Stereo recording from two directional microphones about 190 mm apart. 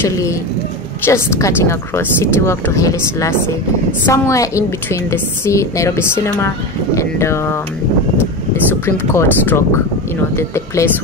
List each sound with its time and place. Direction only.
0.0 s a woman's voice: 15° left (ahead or behind)
8.8 s a woman's voice: 10° left (ahead or behind)